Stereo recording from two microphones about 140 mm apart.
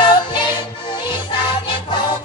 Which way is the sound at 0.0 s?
35° left (ahead or behind).